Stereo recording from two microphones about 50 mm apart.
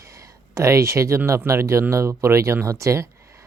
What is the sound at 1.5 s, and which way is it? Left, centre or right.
Speech, right.